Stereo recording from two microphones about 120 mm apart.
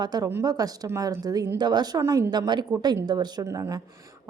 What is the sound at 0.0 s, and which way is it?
A woman's voice, 35° right (ahead or behind).